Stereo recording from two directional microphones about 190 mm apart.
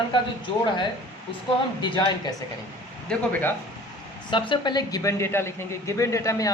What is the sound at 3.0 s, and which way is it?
Speech, 10° left (ahead or behind).